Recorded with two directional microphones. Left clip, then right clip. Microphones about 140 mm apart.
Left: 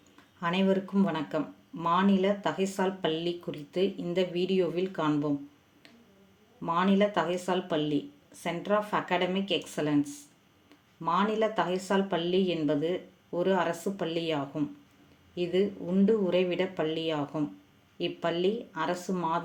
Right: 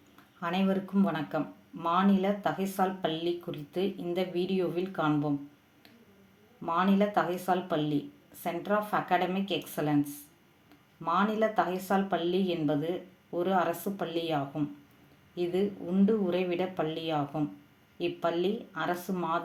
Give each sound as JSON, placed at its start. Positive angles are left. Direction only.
{"t": 0.3, "sound": "speech", "side_deg": 20}
{"t": 6.7, "sound": "a woman's voice", "side_deg": 20}